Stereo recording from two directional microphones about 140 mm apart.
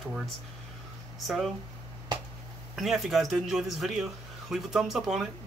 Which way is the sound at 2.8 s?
Centre (ahead or behind).